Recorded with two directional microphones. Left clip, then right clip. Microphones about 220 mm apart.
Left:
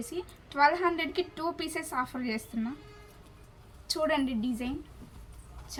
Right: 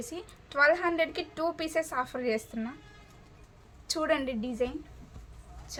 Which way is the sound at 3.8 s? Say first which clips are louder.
Even; 45° right (ahead or behind).